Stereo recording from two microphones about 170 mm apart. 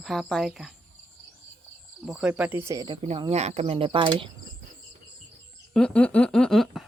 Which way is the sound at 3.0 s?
35° right (ahead or behind).